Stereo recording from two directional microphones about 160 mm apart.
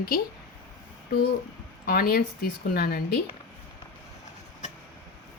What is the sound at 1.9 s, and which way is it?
Speech, 65° left (ahead or behind).